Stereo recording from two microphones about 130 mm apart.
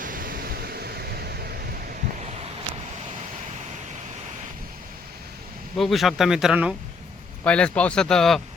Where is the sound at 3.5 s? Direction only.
65° right (ahead or behind).